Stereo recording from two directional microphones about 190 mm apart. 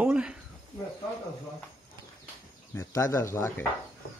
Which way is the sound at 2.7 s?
15° left (ahead or behind).